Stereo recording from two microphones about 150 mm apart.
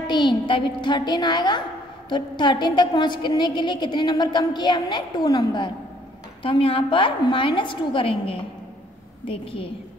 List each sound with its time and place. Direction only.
0.0 s a woman's voice: 30° left (ahead or behind)